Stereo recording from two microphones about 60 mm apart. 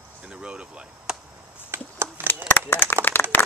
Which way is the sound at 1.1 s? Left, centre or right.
Centre.